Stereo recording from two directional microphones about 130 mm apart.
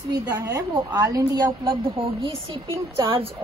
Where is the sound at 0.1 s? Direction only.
30° right (ahead or behind).